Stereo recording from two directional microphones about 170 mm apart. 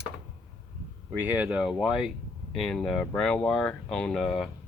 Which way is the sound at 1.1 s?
10° right (ahead or behind).